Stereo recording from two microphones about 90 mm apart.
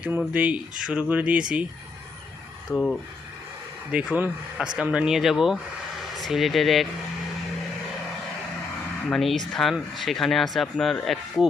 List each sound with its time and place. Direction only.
0.3 s speech: 15° right (ahead or behind)
2.7 s speech: 15° left (ahead or behind)
3.9 s speech: 15° right (ahead or behind); by 6.8 s centre (ahead or behind)
9.0 s speech: 5° left (ahead or behind)